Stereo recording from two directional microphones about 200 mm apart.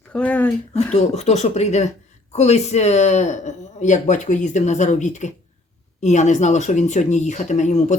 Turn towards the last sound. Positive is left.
turn(degrees=35)  # may be behind; listen again after turning